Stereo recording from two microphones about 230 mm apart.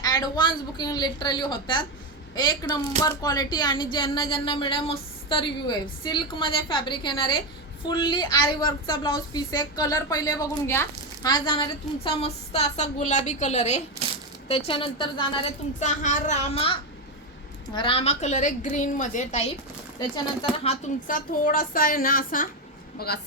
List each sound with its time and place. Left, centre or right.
0.0 s a woman's voice: centre
17.7 s a woman's voice: left
20.7 s a woman's voice: left